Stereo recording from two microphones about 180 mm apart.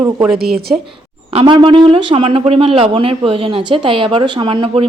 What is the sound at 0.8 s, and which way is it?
A woman's voice, 30° right (ahead or behind).